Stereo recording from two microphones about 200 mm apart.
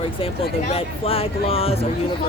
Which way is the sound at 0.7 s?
30° left (ahead or behind).